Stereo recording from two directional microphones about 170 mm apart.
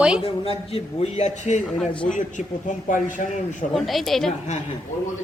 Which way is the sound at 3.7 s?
Centre (ahead or behind).